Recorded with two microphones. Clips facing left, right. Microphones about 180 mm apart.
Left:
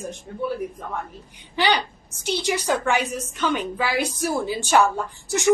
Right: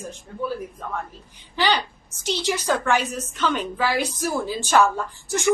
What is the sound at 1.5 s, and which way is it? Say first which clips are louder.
A woman's voice: left 1 dB; 15° left (ahead or behind).